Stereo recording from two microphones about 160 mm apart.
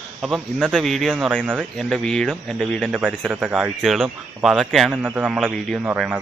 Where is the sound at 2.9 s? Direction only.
10° right (ahead or behind).